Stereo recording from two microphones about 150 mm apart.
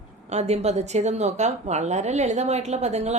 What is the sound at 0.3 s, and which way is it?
Speech, 45° right (ahead or behind).